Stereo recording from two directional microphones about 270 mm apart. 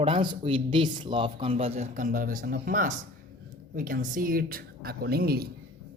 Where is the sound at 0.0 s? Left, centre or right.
Centre; by 5.5 s right.